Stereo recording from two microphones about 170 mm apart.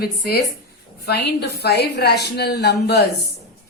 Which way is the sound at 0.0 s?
65° left (ahead or behind).